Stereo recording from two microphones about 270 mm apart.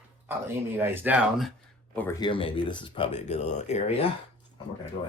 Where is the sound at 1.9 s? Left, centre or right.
Centre; by 3.8 s left.